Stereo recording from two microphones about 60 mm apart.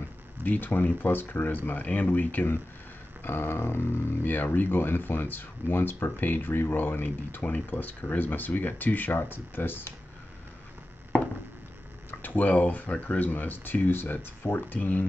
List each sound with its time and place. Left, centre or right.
0.4 s speech: left
12.1 s speech: left